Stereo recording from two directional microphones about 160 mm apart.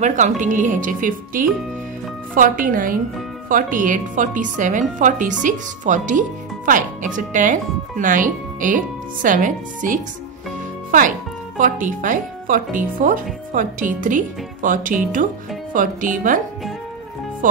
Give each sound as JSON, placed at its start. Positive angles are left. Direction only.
{"t": 0.0, "sound": "a woman's voice", "side_deg": -50}